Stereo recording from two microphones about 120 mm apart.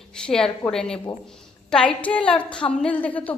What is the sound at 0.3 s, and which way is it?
A woman's voice, 5° left (ahead or behind).